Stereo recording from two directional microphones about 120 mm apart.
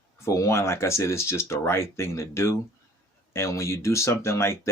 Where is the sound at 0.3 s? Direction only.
25° left (ahead or behind).